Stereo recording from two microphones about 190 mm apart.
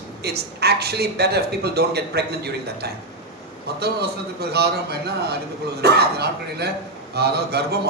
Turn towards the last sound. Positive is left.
turn(degrees=-60)  # may be behind; listen again after turning